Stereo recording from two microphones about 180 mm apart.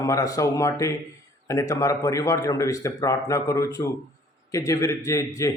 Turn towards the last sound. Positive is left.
turn(degrees=20)  # may be behind; listen again after turning